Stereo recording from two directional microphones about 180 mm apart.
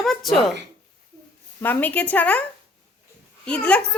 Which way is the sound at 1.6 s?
10° left (ahead or behind).